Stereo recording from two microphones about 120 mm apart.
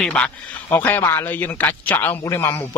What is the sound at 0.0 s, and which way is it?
A man's voice, 10° left (ahead or behind).